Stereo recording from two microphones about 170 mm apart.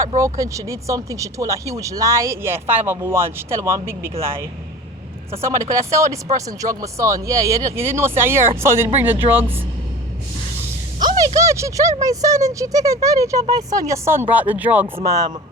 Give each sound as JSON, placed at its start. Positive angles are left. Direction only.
{"t": 0.3, "sound": "speech", "side_deg": -20}
{"t": 5.4, "sound": "speech", "side_deg": -15}
{"t": 11.0, "sound": "a sound", "side_deg": -25}
{"t": 11.3, "sound": "speech", "side_deg": -15}
{"t": 15.0, "sound": "speech", "side_deg": -20}